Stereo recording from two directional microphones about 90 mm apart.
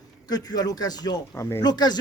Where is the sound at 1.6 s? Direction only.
50° left (ahead or behind).